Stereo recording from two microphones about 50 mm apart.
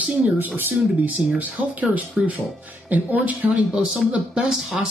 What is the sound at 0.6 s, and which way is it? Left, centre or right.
Speech, right.